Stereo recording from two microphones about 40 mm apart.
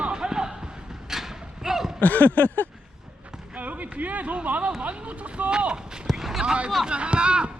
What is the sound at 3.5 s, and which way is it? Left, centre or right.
Speech, right.